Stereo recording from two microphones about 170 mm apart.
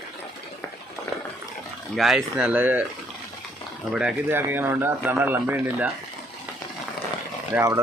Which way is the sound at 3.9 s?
10° right (ahead or behind).